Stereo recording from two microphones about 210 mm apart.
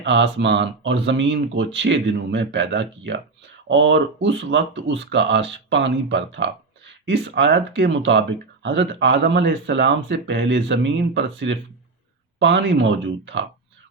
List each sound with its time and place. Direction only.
0.0 s speech: 60° right (ahead or behind)